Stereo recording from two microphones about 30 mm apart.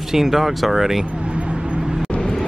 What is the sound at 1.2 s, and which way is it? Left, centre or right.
Vehicle, right.